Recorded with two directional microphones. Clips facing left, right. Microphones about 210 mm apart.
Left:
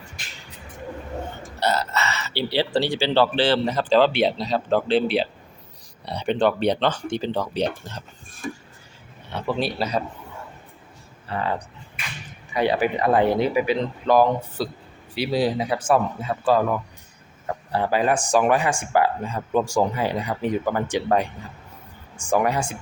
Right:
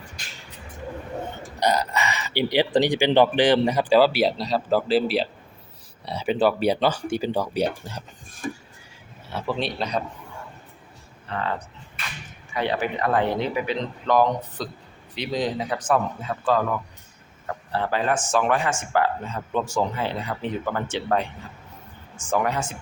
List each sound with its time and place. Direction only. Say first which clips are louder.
1.5 s speech: right 1 dB; 15° right (ahead or behind)
8.4 s a sound: right 1 dB; 35° right (ahead or behind)
9.3 s speech: left 2 dB; centre (ahead or behind)
11.3 s speech: left 2 dB; 10° left (ahead or behind)
12.5 s speech: left 4 dB; 10° left (ahead or behind)
22.3 s speech: left 3 dB; 15° left (ahead or behind)